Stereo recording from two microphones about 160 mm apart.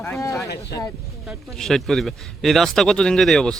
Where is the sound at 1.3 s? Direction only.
5° left (ahead or behind).